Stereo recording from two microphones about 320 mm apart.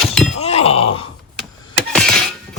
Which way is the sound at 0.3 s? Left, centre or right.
Centre.